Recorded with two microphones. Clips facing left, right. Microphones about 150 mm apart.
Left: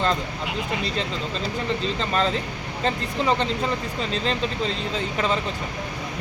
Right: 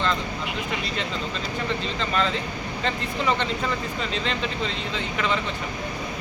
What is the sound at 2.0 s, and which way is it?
Speech, 35° left (ahead or behind).